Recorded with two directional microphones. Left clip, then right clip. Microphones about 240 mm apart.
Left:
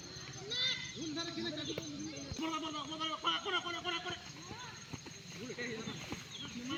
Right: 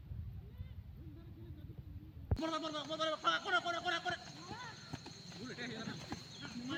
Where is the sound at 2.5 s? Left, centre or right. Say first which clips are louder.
Even; centre.